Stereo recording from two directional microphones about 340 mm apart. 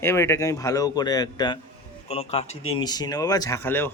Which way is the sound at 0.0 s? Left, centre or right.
Centre.